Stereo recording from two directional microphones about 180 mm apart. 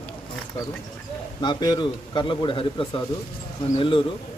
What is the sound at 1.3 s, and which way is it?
Speech, 25° left (ahead or behind).